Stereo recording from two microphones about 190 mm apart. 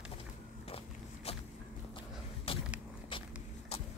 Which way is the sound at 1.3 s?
30° left (ahead or behind).